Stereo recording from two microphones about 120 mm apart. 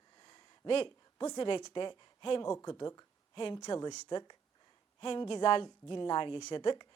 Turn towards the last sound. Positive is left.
turn(degrees=40)  # may be behind; listen again after turning